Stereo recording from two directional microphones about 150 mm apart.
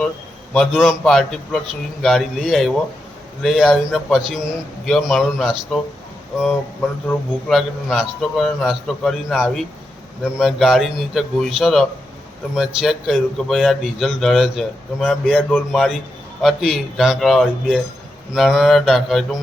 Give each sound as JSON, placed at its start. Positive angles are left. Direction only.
{"t": 0.5, "sound": "speech", "side_deg": 0}
{"t": 7.4, "sound": "speech", "side_deg": 0}
{"t": 15.4, "sound": "speech", "side_deg": 10}
{"t": 15.7, "sound": "speech", "side_deg": 0}